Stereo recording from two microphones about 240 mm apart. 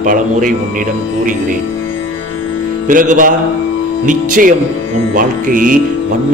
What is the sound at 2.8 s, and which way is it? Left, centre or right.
A man's voice, right.